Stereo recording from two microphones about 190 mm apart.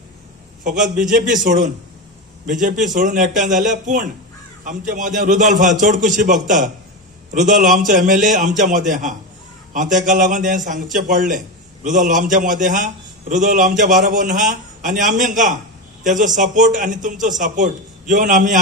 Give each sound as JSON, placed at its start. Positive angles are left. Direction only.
{"t": 0.7, "sound": "a man's voice", "side_deg": -40}